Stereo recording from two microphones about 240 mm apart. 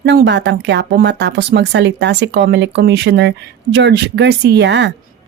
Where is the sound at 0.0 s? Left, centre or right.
Right.